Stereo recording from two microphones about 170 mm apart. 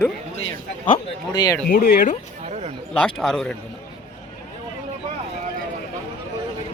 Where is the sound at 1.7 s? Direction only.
60° left (ahead or behind).